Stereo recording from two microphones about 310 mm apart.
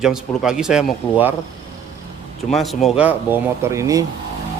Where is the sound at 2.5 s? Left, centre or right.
Centre.